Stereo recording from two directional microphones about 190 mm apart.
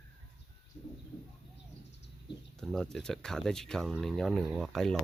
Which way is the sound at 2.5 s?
Centre (ahead or behind).